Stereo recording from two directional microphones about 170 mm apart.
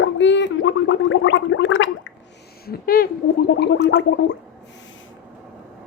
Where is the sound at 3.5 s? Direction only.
75° left (ahead or behind).